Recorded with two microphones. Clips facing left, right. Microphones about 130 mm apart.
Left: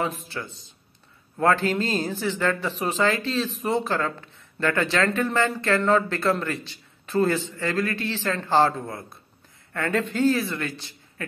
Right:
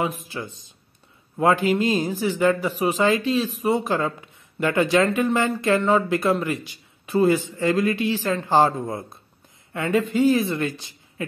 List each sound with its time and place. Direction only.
0.0 s speech: 15° right (ahead or behind)
9.8 s speech: 5° right (ahead or behind)
10.8 s a sound: 15° right (ahead or behind)